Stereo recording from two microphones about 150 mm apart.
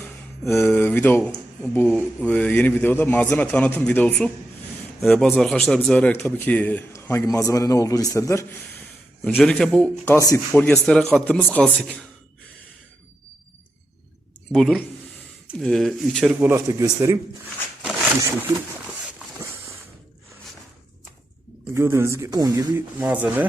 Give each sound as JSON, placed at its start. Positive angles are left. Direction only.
{"t": 0.6, "sound": "speech", "side_deg": 15}
{"t": 9.3, "sound": "a man's voice", "side_deg": 0}
{"t": 10.2, "sound": "speech", "side_deg": 20}
{"t": 10.5, "sound": "a man's voice", "side_deg": 10}
{"t": 11.5, "sound": "speech", "side_deg": 10}
{"t": 14.5, "sound": "a man's voice", "side_deg": 5}
{"t": 16.4, "sound": "speech", "side_deg": -15}
{"t": 21.8, "sound": "speech", "side_deg": -20}
{"t": 23.0, "sound": "speech", "side_deg": -10}